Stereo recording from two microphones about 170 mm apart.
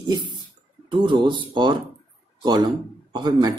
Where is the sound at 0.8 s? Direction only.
30° right (ahead or behind).